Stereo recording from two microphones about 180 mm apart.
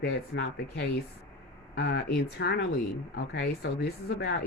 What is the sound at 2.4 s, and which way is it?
A woman's voice, 65° left (ahead or behind).